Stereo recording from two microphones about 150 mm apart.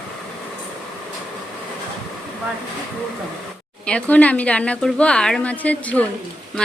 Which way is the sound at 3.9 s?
10° left (ahead or behind).